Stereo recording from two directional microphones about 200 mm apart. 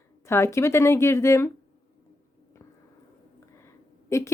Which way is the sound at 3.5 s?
15° left (ahead or behind).